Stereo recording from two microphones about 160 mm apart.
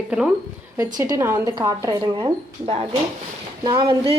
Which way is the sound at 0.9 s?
20° right (ahead or behind).